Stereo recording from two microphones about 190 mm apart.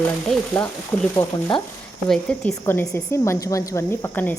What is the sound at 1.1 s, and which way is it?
Stir, 25° left (ahead or behind).